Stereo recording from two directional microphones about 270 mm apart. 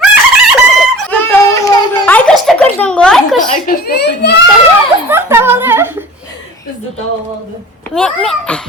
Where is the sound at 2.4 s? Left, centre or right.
Centre.